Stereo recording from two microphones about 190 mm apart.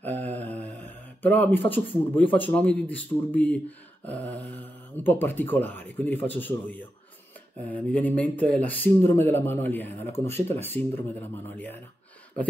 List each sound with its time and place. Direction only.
0.0 s speech: 10° left (ahead or behind)